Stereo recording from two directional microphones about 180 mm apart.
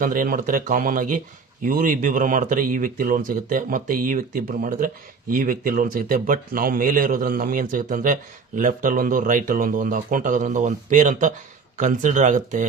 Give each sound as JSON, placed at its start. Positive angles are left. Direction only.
{"t": 0.0, "sound": "speech", "side_deg": -50}